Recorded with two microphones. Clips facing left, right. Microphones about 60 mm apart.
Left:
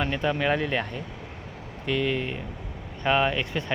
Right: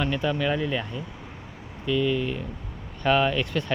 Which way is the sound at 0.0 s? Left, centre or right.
Left.